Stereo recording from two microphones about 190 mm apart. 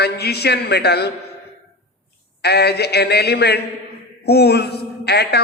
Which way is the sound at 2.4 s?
60° left (ahead or behind).